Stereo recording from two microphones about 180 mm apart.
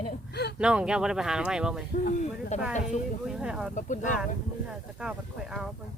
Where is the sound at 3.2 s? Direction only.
5° right (ahead or behind).